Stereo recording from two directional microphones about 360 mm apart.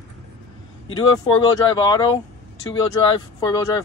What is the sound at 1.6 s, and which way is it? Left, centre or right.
Speech, centre.